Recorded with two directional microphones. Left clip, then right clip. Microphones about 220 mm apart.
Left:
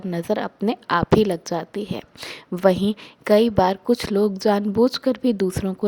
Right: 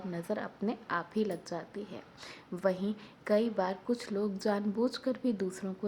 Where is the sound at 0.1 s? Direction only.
40° left (ahead or behind).